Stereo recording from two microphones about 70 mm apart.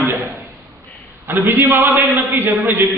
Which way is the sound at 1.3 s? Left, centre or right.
Right.